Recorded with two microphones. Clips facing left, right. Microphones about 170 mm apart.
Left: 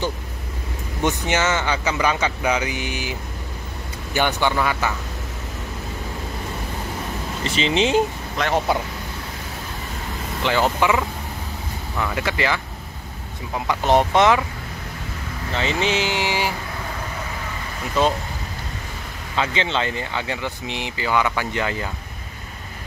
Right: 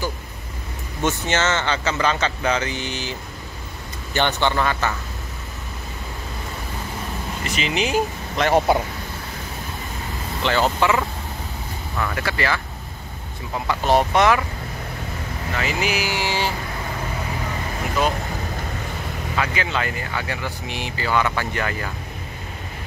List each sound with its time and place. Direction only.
1.0 s speech: 15° left (ahead or behind)
7.4 s speech: 30° left (ahead or behind)
10.4 s speech: 15° left (ahead or behind)
12.0 s speech: 20° left (ahead or behind)
13.7 s speech: 20° left (ahead or behind)
15.5 s speech: 25° left (ahead or behind)
18.0 s speech: 25° left (ahead or behind)
19.3 s speech: 25° left (ahead or behind)